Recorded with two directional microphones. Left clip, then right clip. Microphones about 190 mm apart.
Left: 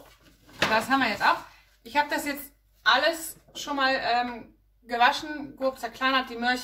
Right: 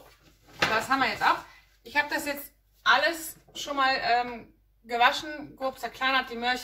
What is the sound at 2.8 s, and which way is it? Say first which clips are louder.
A woman's voice: left 1 dB; 15° left (ahead or behind).